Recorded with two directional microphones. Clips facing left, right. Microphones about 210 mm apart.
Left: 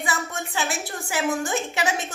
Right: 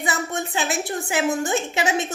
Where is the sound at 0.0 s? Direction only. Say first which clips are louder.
Right 3 dB; 20° right (ahead or behind).